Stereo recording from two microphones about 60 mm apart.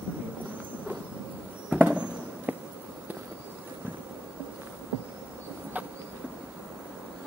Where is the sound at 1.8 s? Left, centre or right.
Right.